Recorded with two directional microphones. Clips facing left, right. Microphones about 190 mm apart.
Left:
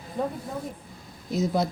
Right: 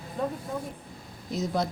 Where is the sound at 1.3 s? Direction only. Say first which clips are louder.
Left 3 dB; 5° left (ahead or behind).